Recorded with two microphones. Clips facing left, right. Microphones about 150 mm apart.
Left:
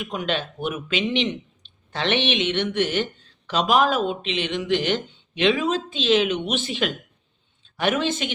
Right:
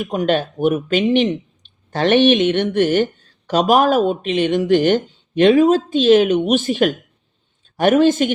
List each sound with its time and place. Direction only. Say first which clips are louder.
0.0 s speech: right 8 dB; 45° right (ahead or behind)